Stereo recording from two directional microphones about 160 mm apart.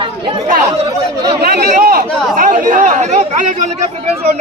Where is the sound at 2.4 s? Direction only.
55° right (ahead or behind).